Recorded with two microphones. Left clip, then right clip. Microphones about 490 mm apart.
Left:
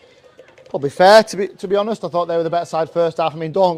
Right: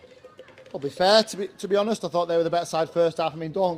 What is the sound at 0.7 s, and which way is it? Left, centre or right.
A man's voice, left.